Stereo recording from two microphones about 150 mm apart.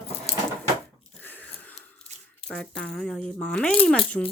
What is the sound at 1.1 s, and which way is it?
Wheeze, 10° left (ahead or behind).